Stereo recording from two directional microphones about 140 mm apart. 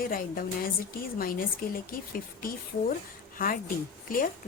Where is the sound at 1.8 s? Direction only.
90° left.